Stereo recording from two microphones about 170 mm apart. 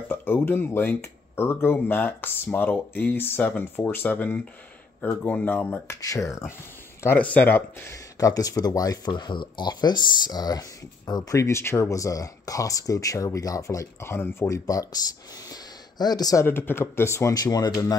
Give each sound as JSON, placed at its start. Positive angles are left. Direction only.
{"t": 0.1, "sound": "speech", "side_deg": 10}